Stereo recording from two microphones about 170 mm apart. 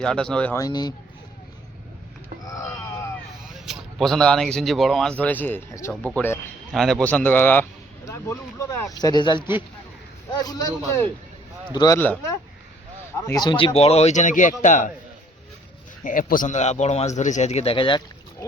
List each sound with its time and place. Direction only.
0.0 s a man's voice: 5° left (ahead or behind)
0.5 s speech: 20° left (ahead or behind)
3.7 s a man's voice: centre (ahead or behind); by 10.7 s 25° left (ahead or behind)
11.7 s speech: 25° left (ahead or behind)
11.9 s a man's voice: 10° left (ahead or behind)
13.7 s speech: 40° left (ahead or behind)
16.0 s speech: 50° left (ahead or behind); by 18.0 s 30° left (ahead or behind)